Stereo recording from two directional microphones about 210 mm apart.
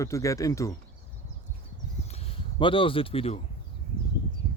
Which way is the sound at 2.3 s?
25° left (ahead or behind).